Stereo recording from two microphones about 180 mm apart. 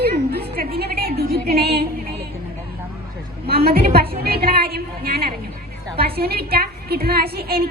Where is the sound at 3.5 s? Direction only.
60° right (ahead or behind).